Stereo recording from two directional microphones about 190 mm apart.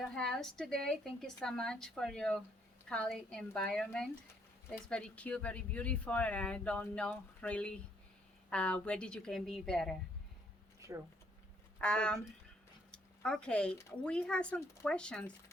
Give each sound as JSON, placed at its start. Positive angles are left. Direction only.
{"t": 0.0, "sound": "a woman's voice", "side_deg": 0}
{"t": 10.8, "sound": "a sound", "side_deg": -15}
{"t": 11.8, "sound": "a woman's voice", "side_deg": 5}